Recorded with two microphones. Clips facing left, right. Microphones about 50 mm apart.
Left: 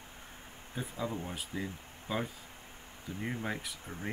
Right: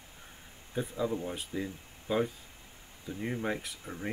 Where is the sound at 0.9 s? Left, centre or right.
Centre.